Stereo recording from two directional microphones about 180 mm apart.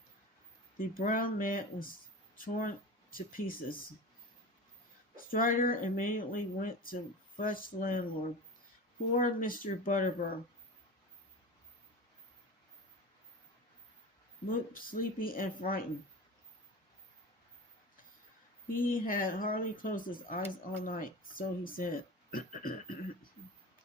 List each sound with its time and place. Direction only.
0.8 s speech: 50° left (ahead or behind)
5.1 s speech: 50° left (ahead or behind)
9.1 s speech: 50° left (ahead or behind)
14.4 s speech: 50° left (ahead or behind)
18.8 s speech: 50° left (ahead or behind)